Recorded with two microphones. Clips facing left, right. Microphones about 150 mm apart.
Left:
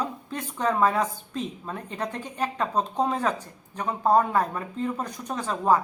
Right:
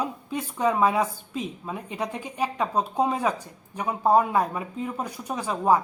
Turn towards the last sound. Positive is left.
turn(degrees=-10)  # may be behind; listen again after turning